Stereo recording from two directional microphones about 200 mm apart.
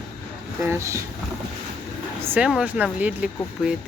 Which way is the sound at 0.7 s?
15° right (ahead or behind).